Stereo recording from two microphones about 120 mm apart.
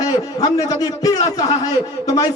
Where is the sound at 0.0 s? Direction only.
30° left (ahead or behind).